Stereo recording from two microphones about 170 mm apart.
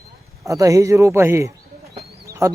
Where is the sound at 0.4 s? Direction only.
20° right (ahead or behind).